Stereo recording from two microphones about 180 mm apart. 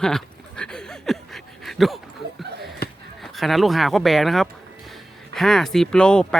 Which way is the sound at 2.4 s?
65° right (ahead or behind).